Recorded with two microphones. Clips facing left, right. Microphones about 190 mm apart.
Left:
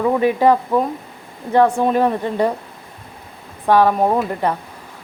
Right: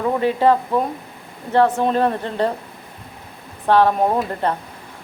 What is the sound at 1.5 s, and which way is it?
Speech, 10° left (ahead or behind).